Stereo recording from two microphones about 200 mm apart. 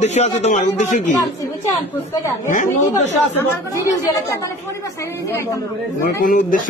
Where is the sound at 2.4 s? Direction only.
40° left (ahead or behind).